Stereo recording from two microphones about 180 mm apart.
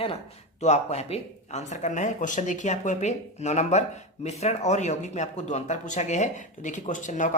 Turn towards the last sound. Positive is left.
turn(degrees=45)  # may be behind; listen again after turning